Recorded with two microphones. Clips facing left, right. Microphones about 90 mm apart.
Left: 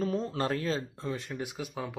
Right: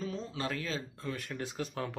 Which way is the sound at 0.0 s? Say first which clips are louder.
Left 7 dB; 50° left (ahead or behind).